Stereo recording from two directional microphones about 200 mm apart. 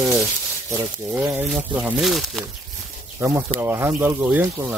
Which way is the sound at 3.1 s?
10° right (ahead or behind).